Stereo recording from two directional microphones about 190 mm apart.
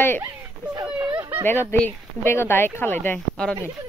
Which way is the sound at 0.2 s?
10° right (ahead or behind).